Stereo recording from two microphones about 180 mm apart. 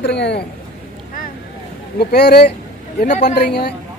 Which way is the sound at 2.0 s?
65° left (ahead or behind).